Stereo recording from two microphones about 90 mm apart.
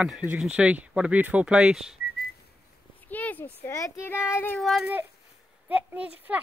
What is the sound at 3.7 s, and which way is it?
Speech, 35° left (ahead or behind).